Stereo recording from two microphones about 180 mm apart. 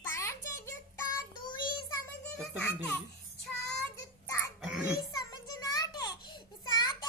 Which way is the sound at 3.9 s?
15° left (ahead or behind).